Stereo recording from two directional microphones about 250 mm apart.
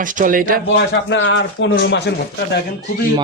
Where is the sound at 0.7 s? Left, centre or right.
Left.